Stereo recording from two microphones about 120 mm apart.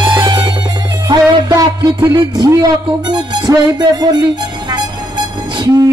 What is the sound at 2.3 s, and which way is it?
Speech, 30° right (ahead or behind).